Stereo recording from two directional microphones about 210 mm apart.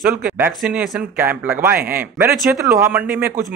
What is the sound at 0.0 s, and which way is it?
Speech, 5° right (ahead or behind).